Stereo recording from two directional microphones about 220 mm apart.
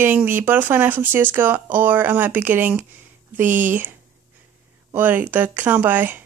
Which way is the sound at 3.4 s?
35° right (ahead or behind).